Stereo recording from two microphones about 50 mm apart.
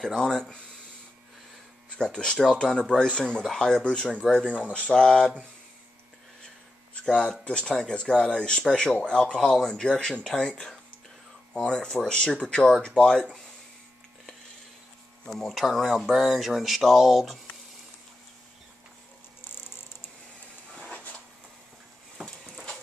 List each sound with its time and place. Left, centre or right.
0.1 s speech: centre
2.0 s speech: centre
4.5 s speech: right
4.7 s speech: centre
7.1 s speech: centre
15.2 s speech: centre
22.2 s a sound: centre